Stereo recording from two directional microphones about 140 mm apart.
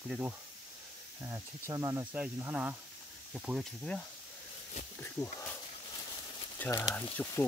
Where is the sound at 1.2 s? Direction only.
25° right (ahead or behind).